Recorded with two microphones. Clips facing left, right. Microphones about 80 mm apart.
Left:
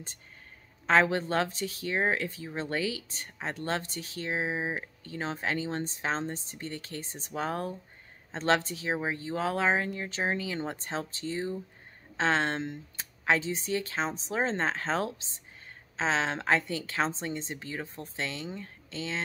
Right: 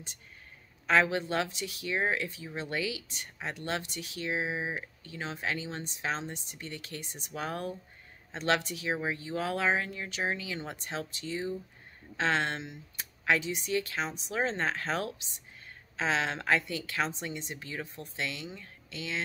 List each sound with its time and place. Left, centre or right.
0.8 s speech: left
13.2 s a woman's voice: left